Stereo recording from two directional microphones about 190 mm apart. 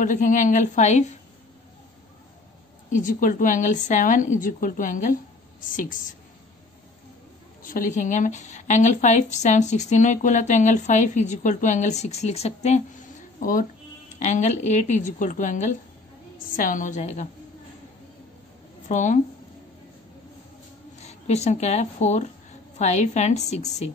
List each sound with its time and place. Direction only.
0.0 s a woman's voice: 40° left (ahead or behind)
2.9 s a woman's voice: 45° left (ahead or behind)
7.6 s a woman's voice: 45° left (ahead or behind)
13.4 s a woman's voice: 45° left (ahead or behind)
18.9 s a woman's voice: 40° left (ahead or behind)
21.0 s a woman's voice: 35° left (ahead or behind)